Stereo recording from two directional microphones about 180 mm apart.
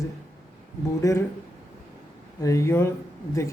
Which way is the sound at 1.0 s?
15° left (ahead or behind).